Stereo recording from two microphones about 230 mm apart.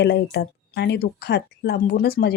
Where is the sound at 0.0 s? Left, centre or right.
Left.